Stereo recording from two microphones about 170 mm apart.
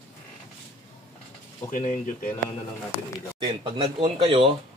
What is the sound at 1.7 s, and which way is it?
Speech, 50° left (ahead or behind).